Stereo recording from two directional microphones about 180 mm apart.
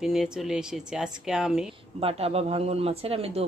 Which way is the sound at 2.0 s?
35° right (ahead or behind).